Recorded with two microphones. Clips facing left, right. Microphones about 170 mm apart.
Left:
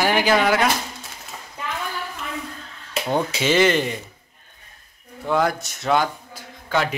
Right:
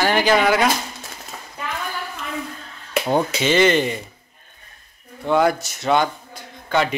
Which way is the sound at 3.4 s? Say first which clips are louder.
Even; 5° left (ahead or behind).